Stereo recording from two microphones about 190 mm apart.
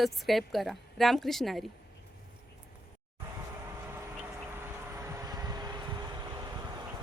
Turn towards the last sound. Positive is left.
turn(degrees=-20)  # may be behind; listen again after turning